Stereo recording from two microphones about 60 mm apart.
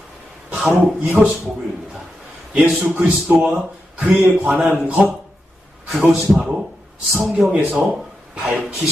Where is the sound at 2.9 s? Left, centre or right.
Right.